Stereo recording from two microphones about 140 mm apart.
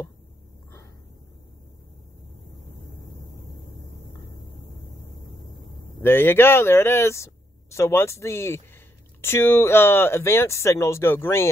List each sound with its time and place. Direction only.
6.0 s speech: 15° left (ahead or behind)